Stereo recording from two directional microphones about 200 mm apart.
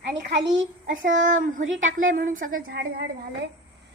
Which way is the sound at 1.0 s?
70° right (ahead or behind).